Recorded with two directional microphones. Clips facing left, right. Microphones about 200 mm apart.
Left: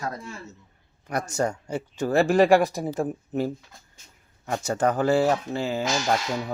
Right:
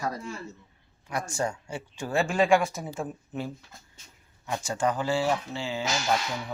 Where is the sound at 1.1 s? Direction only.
40° left (ahead or behind).